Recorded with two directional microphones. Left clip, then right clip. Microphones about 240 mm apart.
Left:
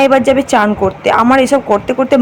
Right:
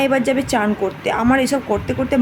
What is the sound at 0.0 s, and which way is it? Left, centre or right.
A woman's voice, centre.